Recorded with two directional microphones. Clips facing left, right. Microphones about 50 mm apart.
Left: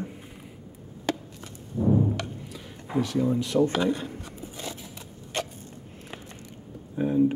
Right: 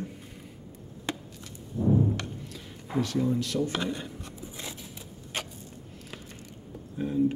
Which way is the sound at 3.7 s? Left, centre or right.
Centre.